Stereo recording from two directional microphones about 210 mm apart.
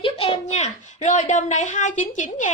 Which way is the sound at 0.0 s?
30° left (ahead or behind).